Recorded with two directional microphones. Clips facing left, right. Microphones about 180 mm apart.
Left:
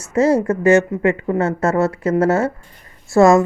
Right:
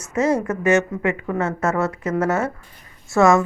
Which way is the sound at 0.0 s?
30° left (ahead or behind).